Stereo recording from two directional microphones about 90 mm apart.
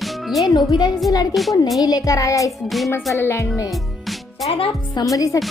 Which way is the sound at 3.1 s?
30° left (ahead or behind).